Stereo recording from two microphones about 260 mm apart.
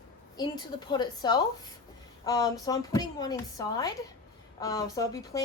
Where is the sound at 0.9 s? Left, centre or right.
Centre.